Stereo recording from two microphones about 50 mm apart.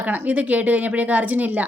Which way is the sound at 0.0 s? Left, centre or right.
Right.